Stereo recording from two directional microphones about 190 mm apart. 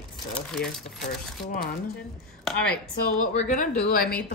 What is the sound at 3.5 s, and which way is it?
Speech, 45° left (ahead or behind).